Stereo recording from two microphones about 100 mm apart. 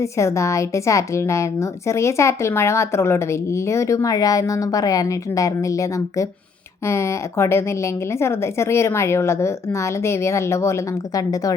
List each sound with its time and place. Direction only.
0.0 s a woman's voice: 30° left (ahead or behind)